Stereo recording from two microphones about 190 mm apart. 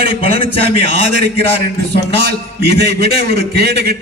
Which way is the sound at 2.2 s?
65° right (ahead or behind).